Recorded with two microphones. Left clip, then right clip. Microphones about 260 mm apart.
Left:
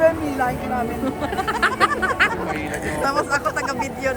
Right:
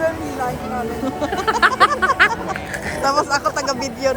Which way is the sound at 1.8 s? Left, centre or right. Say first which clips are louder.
Right 3 dB; right.